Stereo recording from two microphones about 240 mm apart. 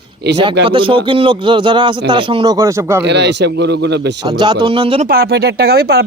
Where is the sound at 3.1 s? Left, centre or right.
Right.